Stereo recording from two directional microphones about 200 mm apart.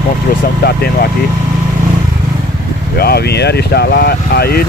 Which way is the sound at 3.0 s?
50° left (ahead or behind).